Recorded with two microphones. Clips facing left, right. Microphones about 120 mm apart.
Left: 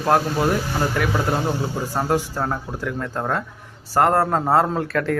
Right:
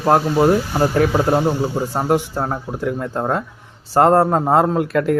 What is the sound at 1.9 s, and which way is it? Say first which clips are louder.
Speech: right 1 dB; 20° right (ahead or behind).